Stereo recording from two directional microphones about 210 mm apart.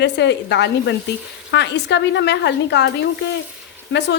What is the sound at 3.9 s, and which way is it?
Speech, 55° left (ahead or behind).